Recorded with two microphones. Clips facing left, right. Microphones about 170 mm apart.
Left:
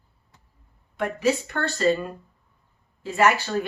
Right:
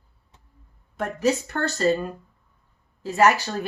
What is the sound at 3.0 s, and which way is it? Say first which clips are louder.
Speech: right 2 dB; 40° right (ahead or behind).